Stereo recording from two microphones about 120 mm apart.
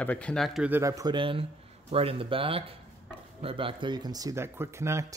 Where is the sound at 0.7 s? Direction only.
25° right (ahead or behind).